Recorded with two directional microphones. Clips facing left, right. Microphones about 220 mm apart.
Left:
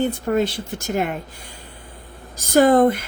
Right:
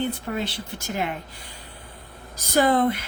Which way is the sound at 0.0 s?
45° left (ahead or behind).